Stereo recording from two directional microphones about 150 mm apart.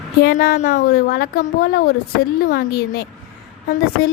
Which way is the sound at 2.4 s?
90° left.